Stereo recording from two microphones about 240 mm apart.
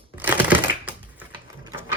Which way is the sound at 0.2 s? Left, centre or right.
Centre.